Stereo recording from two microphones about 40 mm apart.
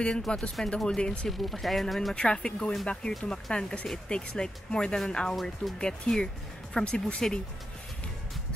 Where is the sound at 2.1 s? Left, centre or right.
Left.